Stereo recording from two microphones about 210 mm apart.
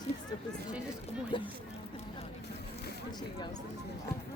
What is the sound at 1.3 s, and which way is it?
Speech, 25° left (ahead or behind).